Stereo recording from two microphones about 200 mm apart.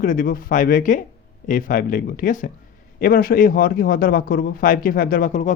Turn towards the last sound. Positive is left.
turn(degrees=40)  # may be behind; listen again after turning